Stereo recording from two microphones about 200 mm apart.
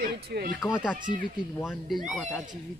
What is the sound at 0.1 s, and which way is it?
Speech, 50° right (ahead or behind).